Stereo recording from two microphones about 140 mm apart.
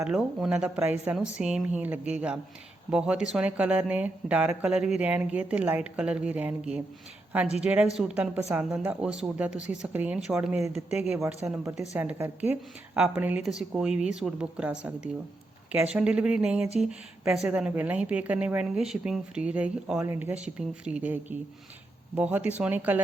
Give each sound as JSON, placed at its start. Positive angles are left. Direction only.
{"t": 0.0, "sound": "speech", "side_deg": -5}